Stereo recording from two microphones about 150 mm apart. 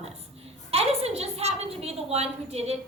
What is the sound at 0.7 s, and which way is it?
A woman's voice, 45° right (ahead or behind).